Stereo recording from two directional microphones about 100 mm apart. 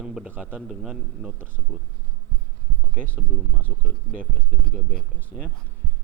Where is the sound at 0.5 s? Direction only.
5° right (ahead or behind).